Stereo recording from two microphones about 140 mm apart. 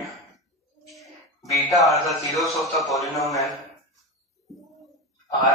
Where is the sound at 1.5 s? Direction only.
Centre (ahead or behind).